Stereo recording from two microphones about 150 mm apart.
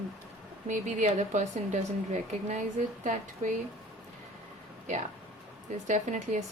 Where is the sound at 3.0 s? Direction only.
55° right (ahead or behind).